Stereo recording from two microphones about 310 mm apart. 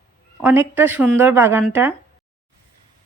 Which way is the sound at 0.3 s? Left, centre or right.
Centre.